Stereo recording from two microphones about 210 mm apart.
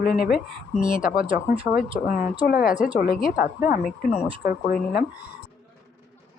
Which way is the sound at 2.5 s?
45° left (ahead or behind).